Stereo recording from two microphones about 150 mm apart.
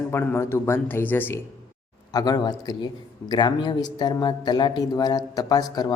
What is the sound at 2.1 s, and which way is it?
A man's voice, 25° left (ahead or behind).